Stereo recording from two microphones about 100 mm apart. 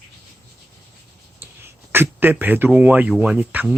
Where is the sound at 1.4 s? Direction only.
20° right (ahead or behind).